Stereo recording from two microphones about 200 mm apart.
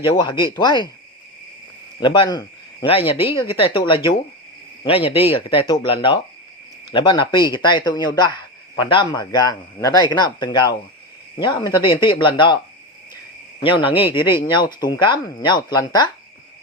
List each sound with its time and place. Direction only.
0.0 s speech: 25° left (ahead or behind)
2.0 s speech: 25° left (ahead or behind)
13.6 s speech: 25° left (ahead or behind)